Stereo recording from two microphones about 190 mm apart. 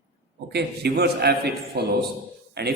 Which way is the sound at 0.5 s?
60° right (ahead or behind).